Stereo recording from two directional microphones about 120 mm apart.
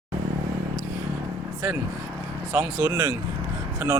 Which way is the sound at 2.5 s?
15° right (ahead or behind).